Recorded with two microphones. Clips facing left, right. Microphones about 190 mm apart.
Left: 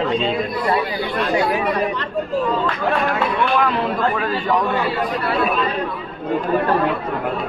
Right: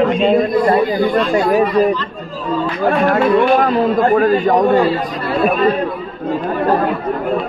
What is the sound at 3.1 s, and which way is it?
A man's voice, 45° right (ahead or behind).